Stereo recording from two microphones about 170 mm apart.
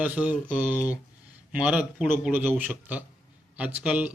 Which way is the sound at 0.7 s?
15° left (ahead or behind).